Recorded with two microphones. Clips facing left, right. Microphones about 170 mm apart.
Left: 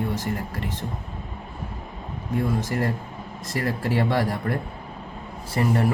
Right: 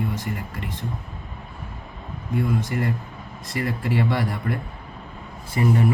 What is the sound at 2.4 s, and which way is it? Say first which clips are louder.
Speech: even; 40° left (ahead or behind).